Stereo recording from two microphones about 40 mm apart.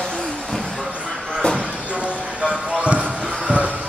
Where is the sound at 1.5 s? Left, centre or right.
Right.